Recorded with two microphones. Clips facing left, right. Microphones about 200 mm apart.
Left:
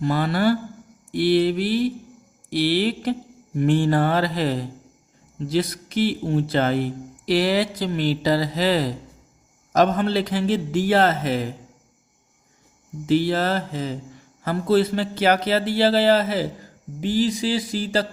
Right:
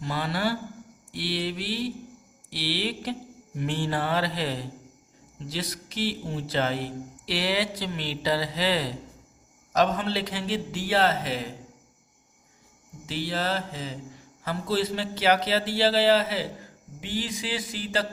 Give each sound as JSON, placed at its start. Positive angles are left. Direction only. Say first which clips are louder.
{"t": 0.0, "sound": "mantra", "louder": "left 8 dB", "side_deg": 50}
{"t": 13.1, "sound": "mantra", "louder": "left 9 dB", "side_deg": 50}
{"t": 17.0, "sound": "a sound", "louder": "left 10 dB", "side_deg": 40}